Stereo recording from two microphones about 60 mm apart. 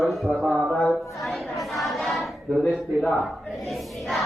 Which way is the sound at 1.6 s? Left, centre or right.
Centre.